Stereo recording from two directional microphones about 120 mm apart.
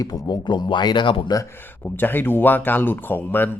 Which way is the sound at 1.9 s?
15° left (ahead or behind).